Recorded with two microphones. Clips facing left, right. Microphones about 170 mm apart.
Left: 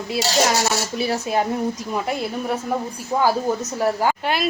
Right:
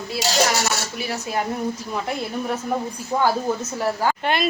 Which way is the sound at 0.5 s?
30° left (ahead or behind).